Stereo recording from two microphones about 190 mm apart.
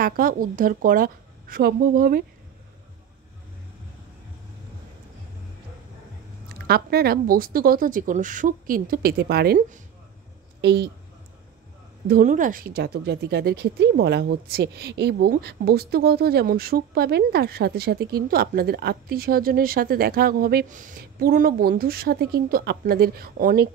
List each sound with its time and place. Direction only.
0.0 s speech: 50° right (ahead or behind)
6.7 s speech: 55° right (ahead or behind)
10.6 s a woman's voice: 65° right (ahead or behind)
12.1 s speech: 45° right (ahead or behind)